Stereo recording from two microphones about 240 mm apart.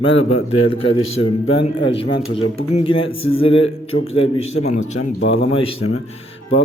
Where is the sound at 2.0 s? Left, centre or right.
Left.